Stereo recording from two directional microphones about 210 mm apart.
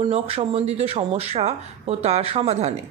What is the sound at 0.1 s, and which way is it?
A woman's voice, 25° right (ahead or behind).